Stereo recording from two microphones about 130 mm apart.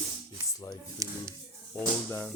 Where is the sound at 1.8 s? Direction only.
15° left (ahead or behind).